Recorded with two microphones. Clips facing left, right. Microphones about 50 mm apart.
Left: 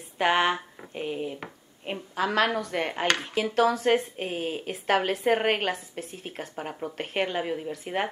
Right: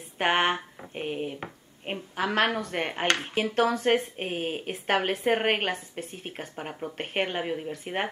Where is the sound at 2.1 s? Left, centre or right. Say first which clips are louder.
Left 1 dB; right.